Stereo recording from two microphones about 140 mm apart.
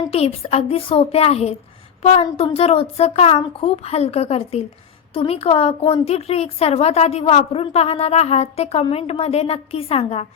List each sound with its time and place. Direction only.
0.1 s a woman's voice: 45° left (ahead or behind)